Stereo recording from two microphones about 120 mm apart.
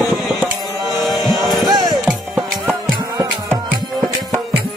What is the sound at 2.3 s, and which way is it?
Music, 20° right (ahead or behind).